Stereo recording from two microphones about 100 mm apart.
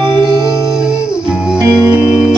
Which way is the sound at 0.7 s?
5° right (ahead or behind).